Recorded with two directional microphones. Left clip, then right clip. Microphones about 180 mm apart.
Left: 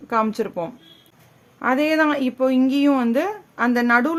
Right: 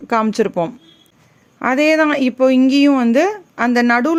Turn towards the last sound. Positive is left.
turn(degrees=-30)  # may be behind; listen again after turning